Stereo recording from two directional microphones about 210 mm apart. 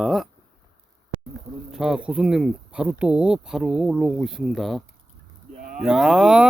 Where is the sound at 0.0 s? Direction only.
Centre (ahead or behind).